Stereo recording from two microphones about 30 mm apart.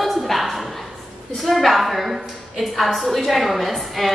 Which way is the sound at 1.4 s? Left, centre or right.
Centre.